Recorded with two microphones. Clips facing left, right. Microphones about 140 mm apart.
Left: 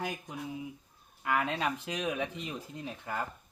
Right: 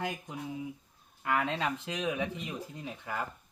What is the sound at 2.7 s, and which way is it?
Speech, 15° right (ahead or behind).